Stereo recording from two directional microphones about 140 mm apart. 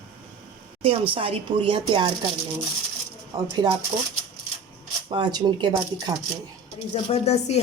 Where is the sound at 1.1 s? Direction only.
40° right (ahead or behind).